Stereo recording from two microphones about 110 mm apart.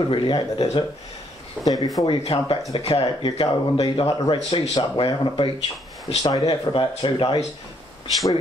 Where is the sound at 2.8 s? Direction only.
65° left (ahead or behind).